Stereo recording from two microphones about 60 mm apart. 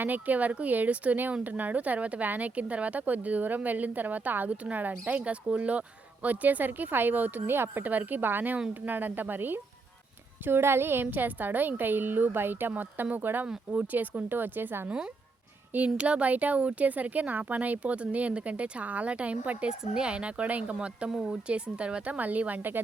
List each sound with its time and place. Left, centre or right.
0.0 s a woman's voice: right
15.7 s speech: right